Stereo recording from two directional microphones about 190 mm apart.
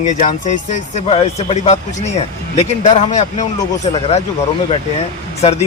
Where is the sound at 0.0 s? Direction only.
40° left (ahead or behind).